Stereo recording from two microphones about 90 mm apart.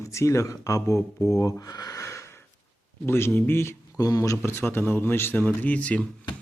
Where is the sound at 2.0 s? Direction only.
30° left (ahead or behind).